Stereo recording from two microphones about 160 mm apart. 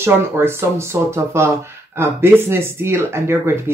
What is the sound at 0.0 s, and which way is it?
Speech, 15° right (ahead or behind).